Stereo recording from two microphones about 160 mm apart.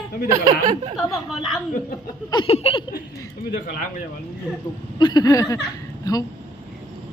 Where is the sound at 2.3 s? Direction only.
35° left (ahead or behind).